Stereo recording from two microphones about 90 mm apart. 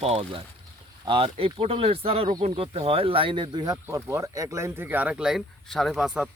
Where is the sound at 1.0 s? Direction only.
80° right; by 3.7 s 55° right (ahead or behind).